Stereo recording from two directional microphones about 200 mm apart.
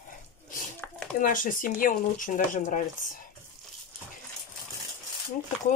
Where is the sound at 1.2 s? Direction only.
40° left (ahead or behind).